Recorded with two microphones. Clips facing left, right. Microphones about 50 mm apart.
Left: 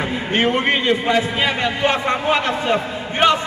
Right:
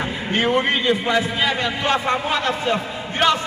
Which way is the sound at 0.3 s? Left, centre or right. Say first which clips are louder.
Left 1 dB; left.